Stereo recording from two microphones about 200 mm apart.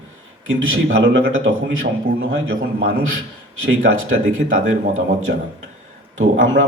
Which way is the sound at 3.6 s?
90° right.